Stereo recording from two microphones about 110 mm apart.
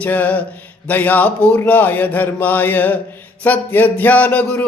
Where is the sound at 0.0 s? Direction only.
15° left (ahead or behind).